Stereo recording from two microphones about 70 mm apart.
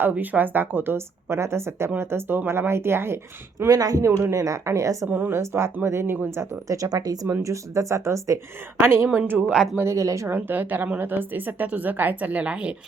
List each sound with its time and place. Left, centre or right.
0.0 s a woman's voice: right
3.7 s speech: right
4.3 s speech: right
5.0 s speech: right
5.4 s a woman's voice: right
6.4 s speech: right
7.4 s a woman's voice: right
9.8 s speech: right
10.2 s speech: right; by 12.7 s centre